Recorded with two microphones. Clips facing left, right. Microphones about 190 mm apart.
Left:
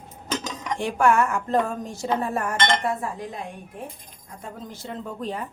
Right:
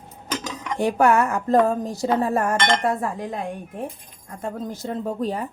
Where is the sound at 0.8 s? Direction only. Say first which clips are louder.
Right 3 dB; 40° right (ahead or behind).